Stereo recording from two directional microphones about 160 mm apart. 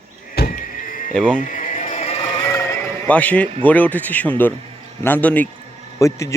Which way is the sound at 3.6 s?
10° left (ahead or behind).